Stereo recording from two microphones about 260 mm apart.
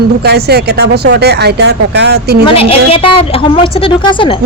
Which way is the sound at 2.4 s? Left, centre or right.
Left.